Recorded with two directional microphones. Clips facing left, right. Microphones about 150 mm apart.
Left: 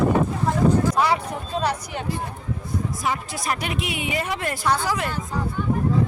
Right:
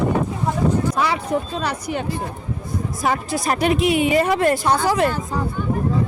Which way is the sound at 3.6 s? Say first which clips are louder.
Right 11 dB; 35° right (ahead or behind).